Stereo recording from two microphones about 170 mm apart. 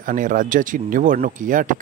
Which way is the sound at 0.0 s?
50° right (ahead or behind).